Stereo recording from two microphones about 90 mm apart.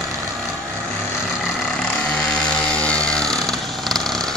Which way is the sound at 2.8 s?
10° left (ahead or behind).